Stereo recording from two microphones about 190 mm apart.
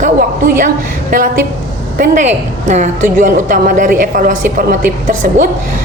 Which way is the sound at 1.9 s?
45° right (ahead or behind).